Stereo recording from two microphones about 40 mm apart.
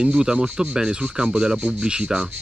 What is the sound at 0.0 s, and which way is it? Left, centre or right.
Speech, centre.